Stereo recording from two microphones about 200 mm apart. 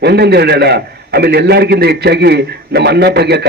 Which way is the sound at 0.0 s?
55° right (ahead or behind).